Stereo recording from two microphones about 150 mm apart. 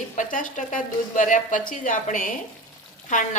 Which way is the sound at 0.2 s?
60° left (ahead or behind).